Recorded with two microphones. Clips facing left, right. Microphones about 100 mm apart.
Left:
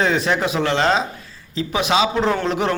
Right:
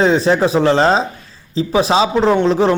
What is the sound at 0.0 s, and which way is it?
A man's voice, 35° right (ahead or behind).